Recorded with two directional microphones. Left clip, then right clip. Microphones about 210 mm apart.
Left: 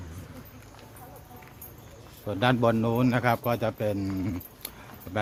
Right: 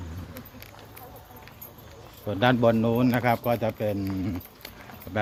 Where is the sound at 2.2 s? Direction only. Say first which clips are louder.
Right 2 dB; 5° left (ahead or behind).